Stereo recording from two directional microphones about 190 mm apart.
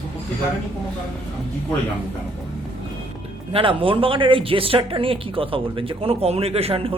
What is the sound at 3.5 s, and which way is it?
A woman's voice, 30° right (ahead or behind).